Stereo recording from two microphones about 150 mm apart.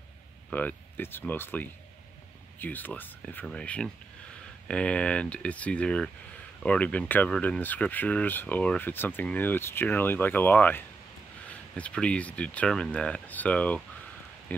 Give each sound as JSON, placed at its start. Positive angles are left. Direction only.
{"t": 0.5, "sound": "speech", "side_deg": 10}